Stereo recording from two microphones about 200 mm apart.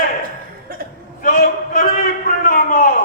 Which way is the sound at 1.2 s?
45° left (ahead or behind).